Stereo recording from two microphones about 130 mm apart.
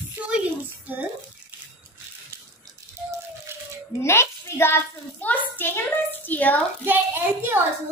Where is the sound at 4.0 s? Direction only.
20° left (ahead or behind).